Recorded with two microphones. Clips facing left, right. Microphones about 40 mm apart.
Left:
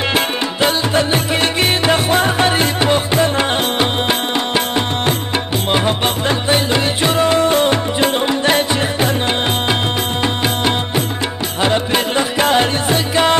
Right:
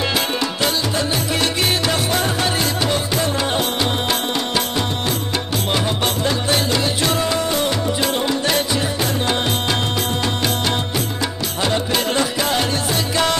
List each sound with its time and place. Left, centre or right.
0.1 s music: left
12.4 s music: left